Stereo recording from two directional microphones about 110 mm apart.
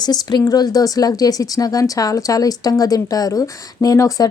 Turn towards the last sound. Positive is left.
turn(degrees=30)  # may be behind; listen again after turning